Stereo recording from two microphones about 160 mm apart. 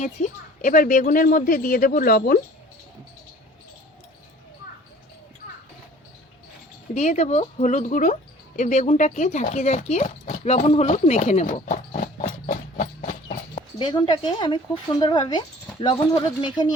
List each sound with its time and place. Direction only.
0.0 s speech: 50° left (ahead or behind); by 2.4 s 65° left (ahead or behind)
6.9 s speech: 45° left (ahead or behind)
13.7 s speech: 30° left (ahead or behind)